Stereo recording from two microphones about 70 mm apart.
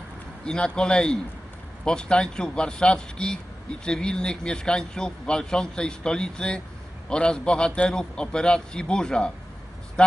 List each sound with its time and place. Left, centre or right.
0.5 s a man's voice: centre